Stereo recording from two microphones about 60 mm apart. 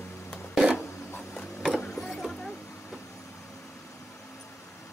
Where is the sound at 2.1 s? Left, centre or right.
Centre.